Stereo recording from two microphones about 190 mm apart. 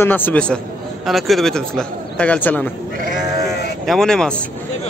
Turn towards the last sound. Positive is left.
turn(degrees=5)  # may be behind; listen again after turning